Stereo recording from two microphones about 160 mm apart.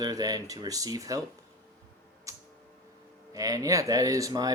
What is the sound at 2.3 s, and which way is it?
Tick, 20° right (ahead or behind).